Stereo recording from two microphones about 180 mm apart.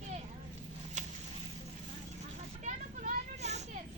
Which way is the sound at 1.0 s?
45° right (ahead or behind).